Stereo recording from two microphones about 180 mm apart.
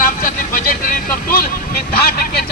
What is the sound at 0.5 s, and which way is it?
Vehicle, 50° left (ahead or behind).